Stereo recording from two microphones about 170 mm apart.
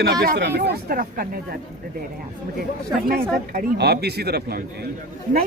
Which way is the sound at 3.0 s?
60° right (ahead or behind).